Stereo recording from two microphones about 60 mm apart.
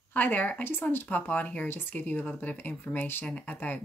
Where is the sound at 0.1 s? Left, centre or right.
Left.